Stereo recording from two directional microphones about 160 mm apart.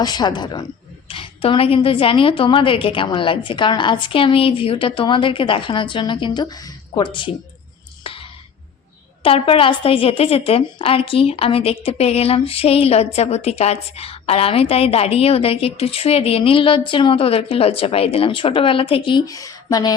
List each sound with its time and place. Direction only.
0.0 s a woman's voice: 25° left (ahead or behind)
8.0 s a sound: 35° left (ahead or behind)
9.2 s a woman's voice: 35° left (ahead or behind)
19.2 s speech: 20° left (ahead or behind)